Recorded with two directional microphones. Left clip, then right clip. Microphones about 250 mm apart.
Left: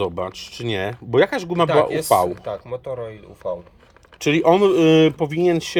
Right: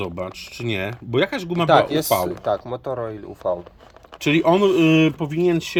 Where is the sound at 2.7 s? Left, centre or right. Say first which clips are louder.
Right 2 dB; right.